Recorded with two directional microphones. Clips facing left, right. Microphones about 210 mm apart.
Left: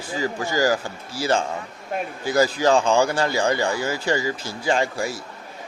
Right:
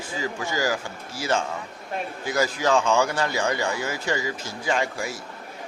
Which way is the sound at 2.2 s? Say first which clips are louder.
Left 5 dB; 35° left (ahead or behind).